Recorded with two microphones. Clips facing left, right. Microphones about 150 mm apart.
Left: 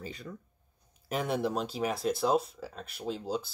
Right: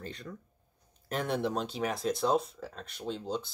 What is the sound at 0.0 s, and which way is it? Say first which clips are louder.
Speech: left 1 dB; 5° left (ahead or behind).